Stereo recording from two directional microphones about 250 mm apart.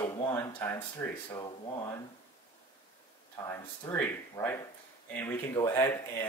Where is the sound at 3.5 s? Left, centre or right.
Centre.